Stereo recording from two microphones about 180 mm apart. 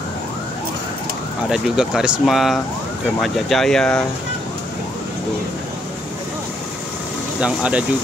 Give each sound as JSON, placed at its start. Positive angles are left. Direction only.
{"t": 1.5, "sound": "speech", "side_deg": -5}
{"t": 7.3, "sound": "speech", "side_deg": -5}